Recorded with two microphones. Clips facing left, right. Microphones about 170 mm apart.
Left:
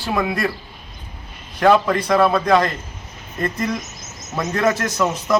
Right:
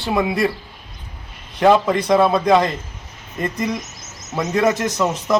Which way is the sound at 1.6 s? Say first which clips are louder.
Right 1 dB; 20° right (ahead or behind).